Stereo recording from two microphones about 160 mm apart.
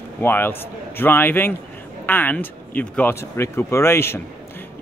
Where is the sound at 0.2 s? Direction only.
15° left (ahead or behind).